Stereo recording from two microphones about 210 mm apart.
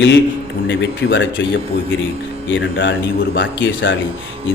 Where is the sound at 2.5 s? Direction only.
60° left (ahead or behind).